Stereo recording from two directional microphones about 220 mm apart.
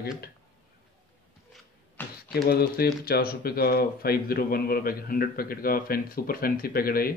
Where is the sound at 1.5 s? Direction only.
Centre (ahead or behind).